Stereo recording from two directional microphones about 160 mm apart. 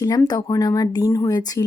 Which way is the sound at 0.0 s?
20° left (ahead or behind).